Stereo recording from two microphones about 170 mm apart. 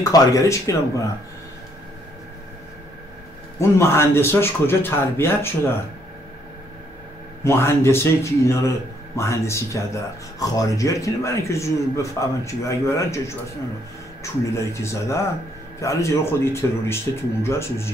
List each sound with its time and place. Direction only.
0.0 s speech: 20° left (ahead or behind)
3.5 s a man's voice: 15° left (ahead or behind)
7.4 s a man's voice: 15° left (ahead or behind)
14.2 s a man's voice: 15° left (ahead or behind)